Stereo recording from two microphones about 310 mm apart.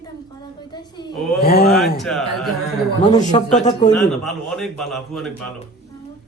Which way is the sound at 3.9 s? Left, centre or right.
Centre.